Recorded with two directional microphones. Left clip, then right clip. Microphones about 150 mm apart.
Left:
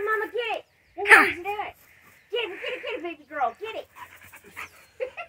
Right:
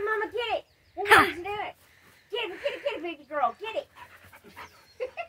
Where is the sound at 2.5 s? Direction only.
5° left (ahead or behind).